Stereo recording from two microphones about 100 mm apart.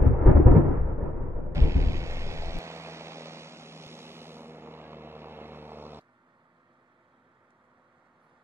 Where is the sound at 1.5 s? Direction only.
30° right (ahead or behind).